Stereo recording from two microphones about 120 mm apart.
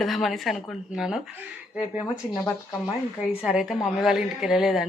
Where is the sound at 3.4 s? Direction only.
5° right (ahead or behind).